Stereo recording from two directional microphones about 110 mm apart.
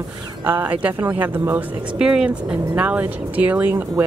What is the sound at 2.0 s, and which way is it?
Speech, 5° right (ahead or behind).